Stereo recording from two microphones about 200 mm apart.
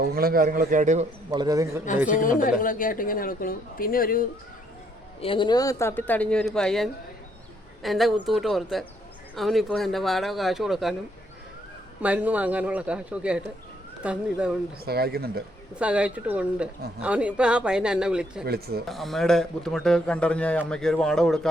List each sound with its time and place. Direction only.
0.0 s speech: 50° right (ahead or behind)
1.3 s a man's voice: 20° right (ahead or behind)
2.0 s a woman's voice: 40° left (ahead or behind)
5.2 s a man's voice: 25° left (ahead or behind); by 10.9 s centre (ahead or behind)
12.0 s a man's voice: 5° right (ahead or behind)
14.8 s speech: 50° right (ahead or behind)
15.8 s a man's voice: 5° right (ahead or behind)
18.4 s speech: 50° right (ahead or behind)
18.9 s a man's voice: centre (ahead or behind)